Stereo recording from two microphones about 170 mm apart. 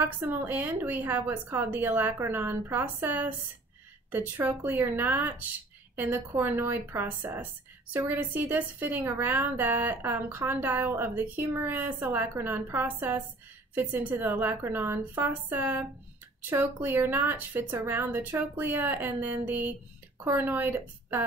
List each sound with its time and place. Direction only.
0.0 s a woman's voice: 10° right (ahead or behind)